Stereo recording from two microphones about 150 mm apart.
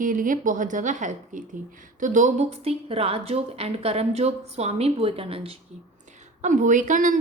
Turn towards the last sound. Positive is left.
turn(degrees=-60)  # may be behind; listen again after turning